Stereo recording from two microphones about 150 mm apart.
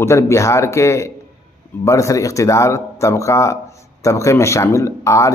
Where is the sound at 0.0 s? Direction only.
20° left (ahead or behind).